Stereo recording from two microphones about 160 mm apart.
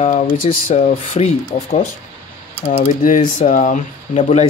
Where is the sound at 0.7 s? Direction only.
45° left (ahead or behind).